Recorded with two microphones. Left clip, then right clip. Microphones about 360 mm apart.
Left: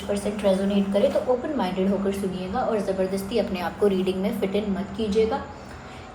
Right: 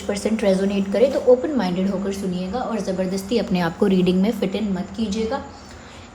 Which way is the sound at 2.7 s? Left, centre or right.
Right.